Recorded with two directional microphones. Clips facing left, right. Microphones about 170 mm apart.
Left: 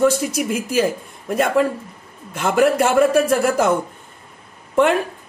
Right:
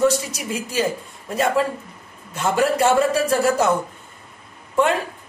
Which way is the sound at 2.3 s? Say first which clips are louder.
Left 3 dB; 60° left (ahead or behind).